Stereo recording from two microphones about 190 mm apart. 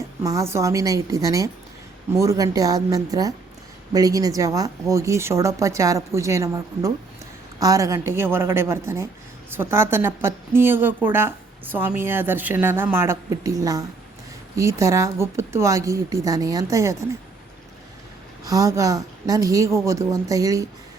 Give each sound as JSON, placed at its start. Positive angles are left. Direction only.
{"t": 0.2, "sound": "a woman's voice", "side_deg": -15}
{"t": 18.4, "sound": "a woman's voice", "side_deg": -15}